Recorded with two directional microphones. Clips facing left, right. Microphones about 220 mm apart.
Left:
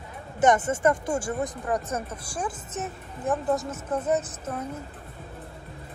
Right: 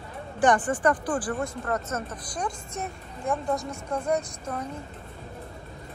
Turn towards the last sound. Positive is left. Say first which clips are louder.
# left 1 dB
turn(degrees=5)  # may be behind; listen again after turning